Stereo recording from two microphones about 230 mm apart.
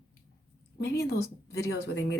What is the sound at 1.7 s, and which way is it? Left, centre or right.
Speech, left.